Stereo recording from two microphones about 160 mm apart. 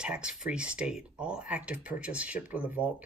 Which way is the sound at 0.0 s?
5° right (ahead or behind).